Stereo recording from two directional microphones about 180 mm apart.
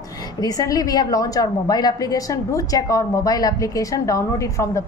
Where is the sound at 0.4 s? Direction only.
20° left (ahead or behind).